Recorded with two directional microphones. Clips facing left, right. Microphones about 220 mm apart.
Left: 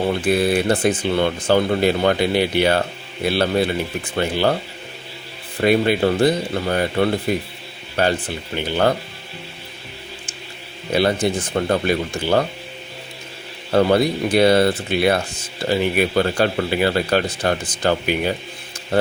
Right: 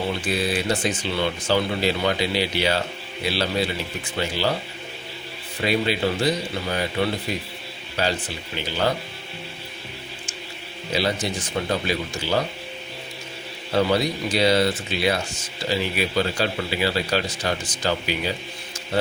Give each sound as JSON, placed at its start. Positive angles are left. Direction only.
{"t": 0.2, "sound": "speech", "side_deg": 55}
{"t": 5.5, "sound": "speech", "side_deg": 55}
{"t": 10.9, "sound": "speech", "side_deg": 55}
{"t": 13.7, "sound": "speech", "side_deg": 55}